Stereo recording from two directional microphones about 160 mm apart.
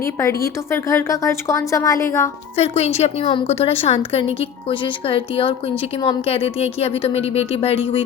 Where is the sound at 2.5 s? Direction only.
40° left (ahead or behind).